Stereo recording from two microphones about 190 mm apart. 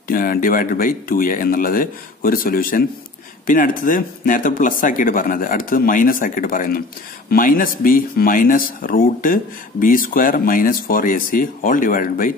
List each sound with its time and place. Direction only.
0.1 s speech: 50° left (ahead or behind)